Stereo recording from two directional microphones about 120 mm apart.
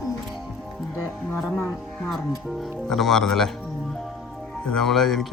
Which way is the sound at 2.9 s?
5° left (ahead or behind).